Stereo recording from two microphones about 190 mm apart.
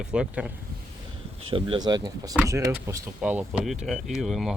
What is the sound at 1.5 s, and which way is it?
Speech, 30° right (ahead or behind).